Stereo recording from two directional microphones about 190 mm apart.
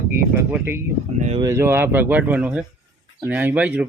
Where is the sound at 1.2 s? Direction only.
35° right (ahead or behind).